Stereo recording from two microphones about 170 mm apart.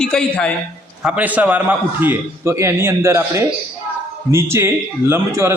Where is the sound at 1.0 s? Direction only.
10° right (ahead or behind).